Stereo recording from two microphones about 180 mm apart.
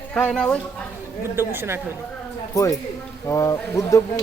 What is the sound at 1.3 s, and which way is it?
Speech, 15° right (ahead or behind).